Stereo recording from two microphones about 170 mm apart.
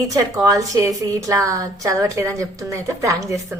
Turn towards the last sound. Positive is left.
turn(degrees=-15)  # may be behind; listen again after turning